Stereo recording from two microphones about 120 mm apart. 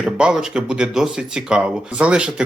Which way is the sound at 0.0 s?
5° right (ahead or behind).